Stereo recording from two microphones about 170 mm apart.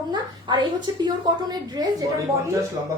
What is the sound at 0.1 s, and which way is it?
A woman's voice, 25° right (ahead or behind).